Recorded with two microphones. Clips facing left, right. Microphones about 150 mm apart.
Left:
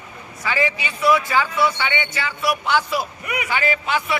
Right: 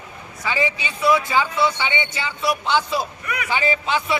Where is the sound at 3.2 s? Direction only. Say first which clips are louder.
Left 1 dB; 15° left (ahead or behind).